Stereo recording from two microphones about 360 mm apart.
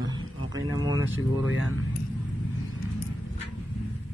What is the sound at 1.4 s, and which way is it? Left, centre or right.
Speech, left.